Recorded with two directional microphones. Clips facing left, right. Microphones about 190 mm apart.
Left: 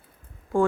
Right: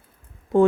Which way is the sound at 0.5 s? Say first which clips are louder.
Right 5 dB; 20° right (ahead or behind).